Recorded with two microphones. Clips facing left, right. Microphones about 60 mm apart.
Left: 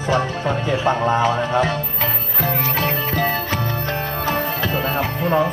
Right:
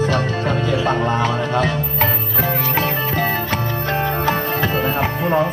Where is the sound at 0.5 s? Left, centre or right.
Centre.